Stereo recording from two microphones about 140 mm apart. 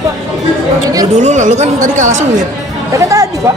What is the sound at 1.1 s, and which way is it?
Speech, 60° right (ahead or behind).